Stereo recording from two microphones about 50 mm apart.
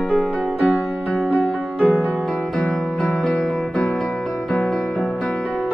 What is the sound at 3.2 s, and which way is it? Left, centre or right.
Music, left.